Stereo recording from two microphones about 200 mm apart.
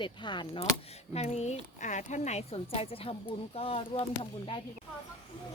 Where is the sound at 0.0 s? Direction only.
25° left (ahead or behind).